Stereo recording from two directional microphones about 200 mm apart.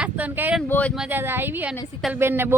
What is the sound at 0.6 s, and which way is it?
Speech, 10° left (ahead or behind).